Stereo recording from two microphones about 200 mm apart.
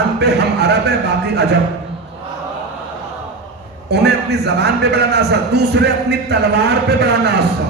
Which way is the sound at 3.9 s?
55° right (ahead or behind).